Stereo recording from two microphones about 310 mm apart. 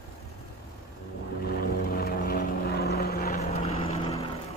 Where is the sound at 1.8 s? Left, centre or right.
Left.